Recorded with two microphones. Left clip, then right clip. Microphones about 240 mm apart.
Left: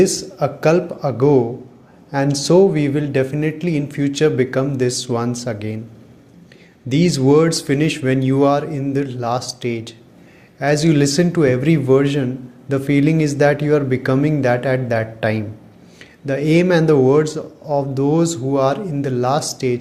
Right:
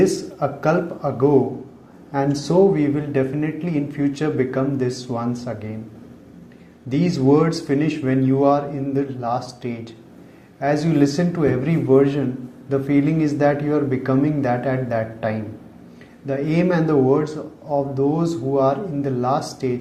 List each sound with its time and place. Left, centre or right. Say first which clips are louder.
0.0 s speech: left 3 dB; left
6.8 s speech: left 3 dB; left